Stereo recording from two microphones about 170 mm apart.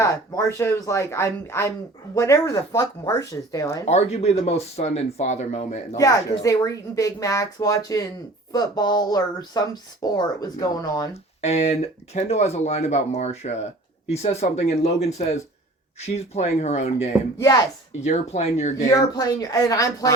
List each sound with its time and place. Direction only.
0.0 s speech: 15° left (ahead or behind)
3.8 s speech: 40° left (ahead or behind)
6.0 s speech: 20° left (ahead or behind)
11.3 s speech: 40° left (ahead or behind)
17.3 s speech: 20° left (ahead or behind)
18.0 s speech: 40° left (ahead or behind)
19.1 s speech: 25° left (ahead or behind)